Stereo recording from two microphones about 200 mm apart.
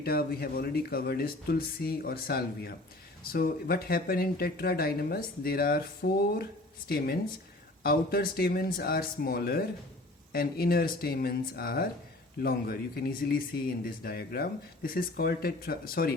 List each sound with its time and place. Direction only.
0.0 s speech: 50° left (ahead or behind)